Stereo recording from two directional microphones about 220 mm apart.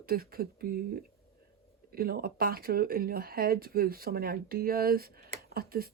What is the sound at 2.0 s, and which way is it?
Speech, 45° right (ahead or behind).